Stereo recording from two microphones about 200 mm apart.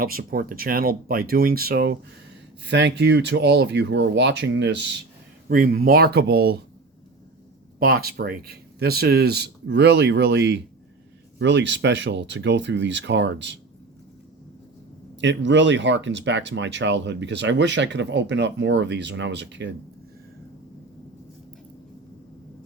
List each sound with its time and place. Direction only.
0.0 s speech: 45° right (ahead or behind)
5.5 s speech: 45° right (ahead or behind)
7.8 s speech: 50° right (ahead or behind)
15.2 s speech: 65° right (ahead or behind)